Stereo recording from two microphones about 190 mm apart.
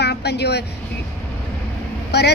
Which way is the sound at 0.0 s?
60° left (ahead or behind).